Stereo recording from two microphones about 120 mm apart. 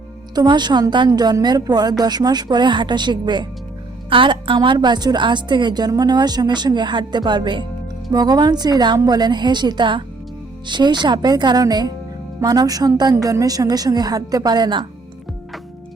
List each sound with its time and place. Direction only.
0.3 s a woman's voice: 40° right (ahead or behind)